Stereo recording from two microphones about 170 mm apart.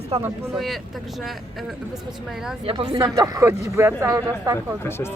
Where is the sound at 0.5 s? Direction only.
Centre (ahead or behind).